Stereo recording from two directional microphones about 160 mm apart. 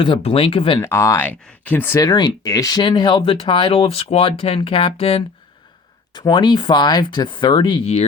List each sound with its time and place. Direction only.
0.0 s speech: 35° left (ahead or behind)
0.8 s speech: 15° left (ahead or behind); by 8.0 s 35° left (ahead or behind)